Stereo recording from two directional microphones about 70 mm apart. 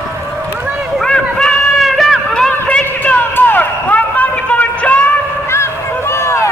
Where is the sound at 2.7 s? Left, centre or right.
Centre.